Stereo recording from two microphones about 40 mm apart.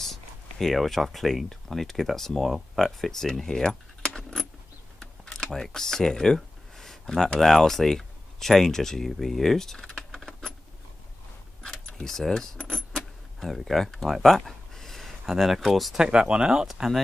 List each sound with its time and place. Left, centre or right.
0.0 s speech: centre
5.0 s a sound: left
5.5 s speech: centre
12.0 s speech: centre
12.7 s keys jangling: centre
16.0 s speech: right; by 17.0 s centre